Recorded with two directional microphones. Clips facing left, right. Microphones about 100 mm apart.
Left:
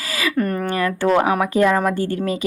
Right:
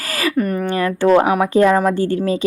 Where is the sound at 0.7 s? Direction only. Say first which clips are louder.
Right 6 dB; 25° right (ahead or behind).